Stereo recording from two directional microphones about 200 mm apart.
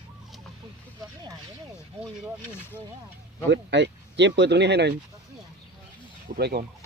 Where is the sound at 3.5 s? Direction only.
60° right (ahead or behind).